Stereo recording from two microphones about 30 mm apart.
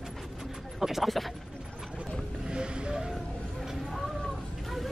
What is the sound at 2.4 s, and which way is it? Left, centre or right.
Vehicle, right.